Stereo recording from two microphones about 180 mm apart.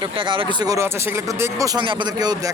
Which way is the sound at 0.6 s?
15° right (ahead or behind).